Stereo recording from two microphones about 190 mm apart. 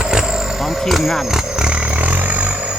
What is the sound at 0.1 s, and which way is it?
Vehicle, centre (ahead or behind).